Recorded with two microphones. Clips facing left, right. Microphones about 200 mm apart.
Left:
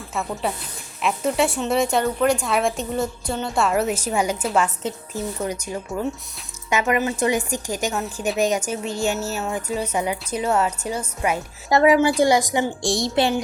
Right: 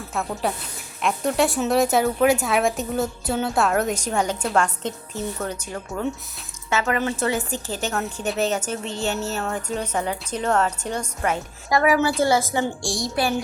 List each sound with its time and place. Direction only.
0.1 s a woman's voice: centre (ahead or behind)
11.7 s a woman's voice: 25° left (ahead or behind)